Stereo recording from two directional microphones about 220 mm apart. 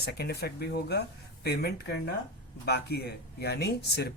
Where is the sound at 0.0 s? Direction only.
45° left (ahead or behind).